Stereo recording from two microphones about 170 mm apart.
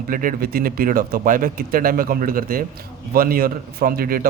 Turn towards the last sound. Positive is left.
turn(degrees=-60)  # may be behind; listen again after turning